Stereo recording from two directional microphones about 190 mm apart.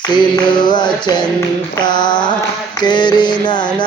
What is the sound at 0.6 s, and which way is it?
Mantra, 25° left (ahead or behind).